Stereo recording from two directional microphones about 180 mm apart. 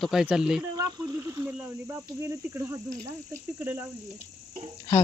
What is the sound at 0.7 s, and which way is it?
Speech, 20° right (ahead or behind).